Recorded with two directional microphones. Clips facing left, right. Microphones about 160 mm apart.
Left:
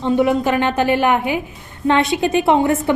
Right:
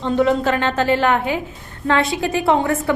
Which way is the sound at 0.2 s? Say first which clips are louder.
Right 2 dB; 15° left (ahead or behind).